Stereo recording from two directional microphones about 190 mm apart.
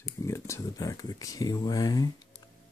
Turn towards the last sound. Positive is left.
turn(degrees=20)  # may be behind; listen again after turning